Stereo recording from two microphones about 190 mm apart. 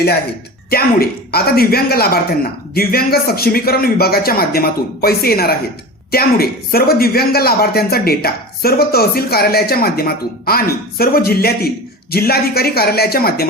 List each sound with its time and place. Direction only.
0.7 s speech: 55° left (ahead or behind)